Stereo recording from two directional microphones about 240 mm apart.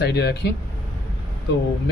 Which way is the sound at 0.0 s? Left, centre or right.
Left.